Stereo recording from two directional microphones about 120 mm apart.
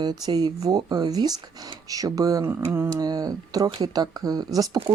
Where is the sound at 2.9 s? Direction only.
30° right (ahead or behind).